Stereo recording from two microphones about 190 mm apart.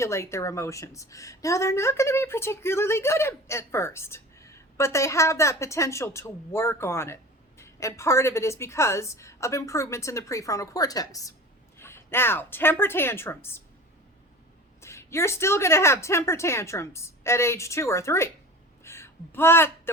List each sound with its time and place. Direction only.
0.0 s a woman's voice: 15° left (ahead or behind)
14.8 s a woman's voice: 15° left (ahead or behind)
18.8 s a sound: 15° left (ahead or behind)